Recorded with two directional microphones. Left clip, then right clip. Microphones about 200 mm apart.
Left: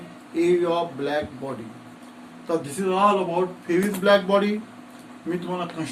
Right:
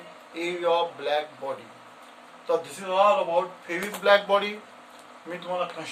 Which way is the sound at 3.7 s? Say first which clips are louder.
Left 3 dB; 25° right (ahead or behind).